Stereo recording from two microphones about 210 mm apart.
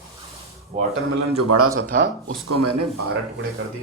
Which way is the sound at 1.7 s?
45° right (ahead or behind).